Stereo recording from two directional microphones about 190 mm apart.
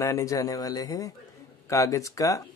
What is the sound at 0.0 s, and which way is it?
Speech, 15° left (ahead or behind).